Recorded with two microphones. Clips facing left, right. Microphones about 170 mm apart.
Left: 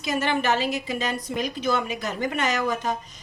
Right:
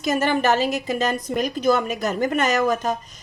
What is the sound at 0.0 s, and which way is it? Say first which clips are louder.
Speech: right 4 dB; 45° right (ahead or behind).